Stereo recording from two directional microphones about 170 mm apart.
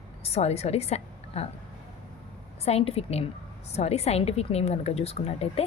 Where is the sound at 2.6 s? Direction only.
35° left (ahead or behind).